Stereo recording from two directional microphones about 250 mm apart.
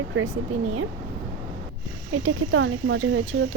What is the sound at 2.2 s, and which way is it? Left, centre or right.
Speech, right.